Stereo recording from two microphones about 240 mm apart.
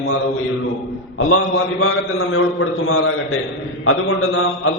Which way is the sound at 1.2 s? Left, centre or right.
Left.